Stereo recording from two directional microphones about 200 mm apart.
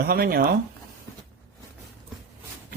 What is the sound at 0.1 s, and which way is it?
Speech, 50° right (ahead or behind).